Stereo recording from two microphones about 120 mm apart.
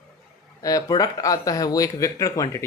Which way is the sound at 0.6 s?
30° left (ahead or behind).